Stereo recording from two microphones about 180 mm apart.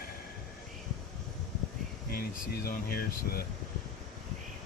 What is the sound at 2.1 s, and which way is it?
Speech, 55° left (ahead or behind).